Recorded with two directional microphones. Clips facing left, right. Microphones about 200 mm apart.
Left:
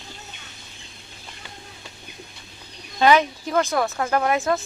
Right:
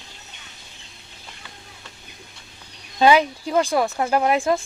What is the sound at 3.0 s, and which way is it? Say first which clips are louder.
Speech: right 1 dB; 15° right (ahead or behind).